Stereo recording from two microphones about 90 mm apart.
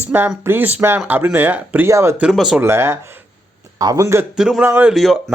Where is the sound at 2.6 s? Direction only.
30° right (ahead or behind).